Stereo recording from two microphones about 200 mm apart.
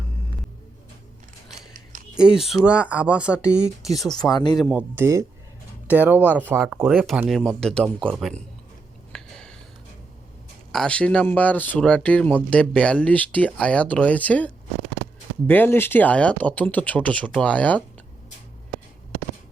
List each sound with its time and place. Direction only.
1.7 s a sound: 40° right (ahead or behind)
2.1 s speech: 5° right (ahead or behind)
4.0 s speech: 20° left (ahead or behind)
4.7 s speech: 10° right (ahead or behind)
9.1 s a sound: 5° left (ahead or behind)
10.7 s speech: 5° left (ahead or behind)